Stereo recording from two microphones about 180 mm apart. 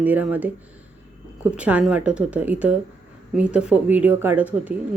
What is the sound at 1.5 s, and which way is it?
Speech, 5° right (ahead or behind).